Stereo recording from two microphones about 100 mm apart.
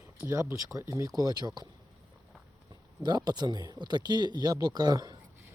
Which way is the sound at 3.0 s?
45° right (ahead or behind).